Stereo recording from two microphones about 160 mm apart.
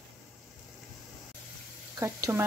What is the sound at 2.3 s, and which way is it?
Speech, 15° right (ahead or behind).